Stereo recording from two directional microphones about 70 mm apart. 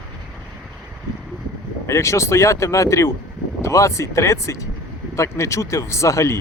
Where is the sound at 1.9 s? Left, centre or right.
Left.